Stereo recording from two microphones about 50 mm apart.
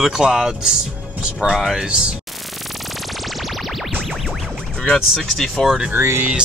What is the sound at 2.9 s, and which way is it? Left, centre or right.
Music, centre.